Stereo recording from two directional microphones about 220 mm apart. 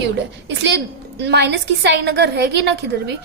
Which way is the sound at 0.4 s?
55° right (ahead or behind).